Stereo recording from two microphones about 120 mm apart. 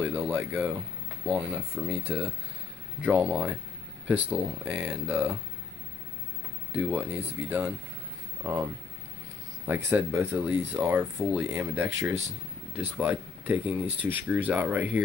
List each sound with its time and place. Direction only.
0.0 s speech: 15° right (ahead or behind)
6.7 s speech: 15° right (ahead or behind)
8.4 s speech: 30° right (ahead or behind)
9.7 s speech: 15° right (ahead or behind)